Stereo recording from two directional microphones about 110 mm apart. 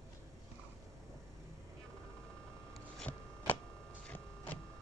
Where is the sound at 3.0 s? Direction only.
15° left (ahead or behind).